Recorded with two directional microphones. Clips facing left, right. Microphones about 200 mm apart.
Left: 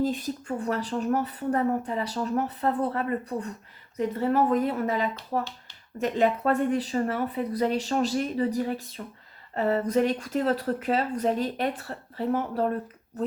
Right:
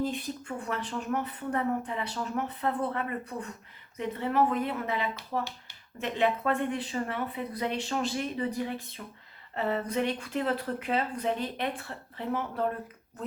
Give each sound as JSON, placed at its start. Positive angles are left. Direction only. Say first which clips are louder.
{"t": 0.0, "sound": "speech", "louder": "left 5 dB", "side_deg": 40}